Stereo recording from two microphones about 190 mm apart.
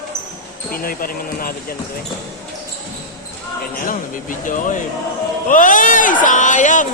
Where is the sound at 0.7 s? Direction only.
50° left (ahead or behind).